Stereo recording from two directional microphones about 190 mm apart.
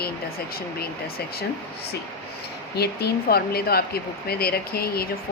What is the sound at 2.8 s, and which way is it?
Speech, 55° left (ahead or behind).